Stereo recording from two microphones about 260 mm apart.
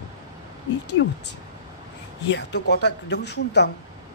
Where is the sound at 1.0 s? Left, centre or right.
Left.